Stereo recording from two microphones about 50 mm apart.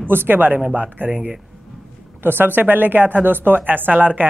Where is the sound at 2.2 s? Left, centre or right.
Right.